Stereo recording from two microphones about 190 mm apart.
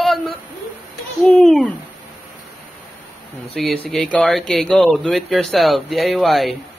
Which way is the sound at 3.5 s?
Centre (ahead or behind).